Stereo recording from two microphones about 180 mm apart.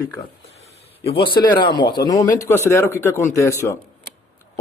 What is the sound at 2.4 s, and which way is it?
Speech, 10° left (ahead or behind).